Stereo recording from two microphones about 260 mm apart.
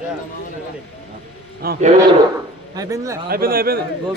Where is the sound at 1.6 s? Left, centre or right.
Right.